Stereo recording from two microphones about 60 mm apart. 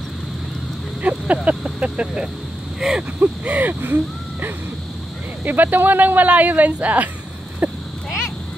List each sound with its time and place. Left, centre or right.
1.0 s speech: right
2.8 s speech: centre
3.2 s speech: right